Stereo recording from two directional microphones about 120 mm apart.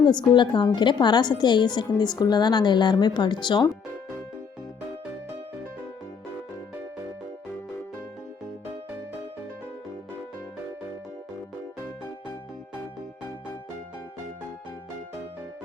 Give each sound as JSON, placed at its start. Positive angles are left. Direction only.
{"t": 0.0, "sound": "a woman's voice", "side_deg": 40}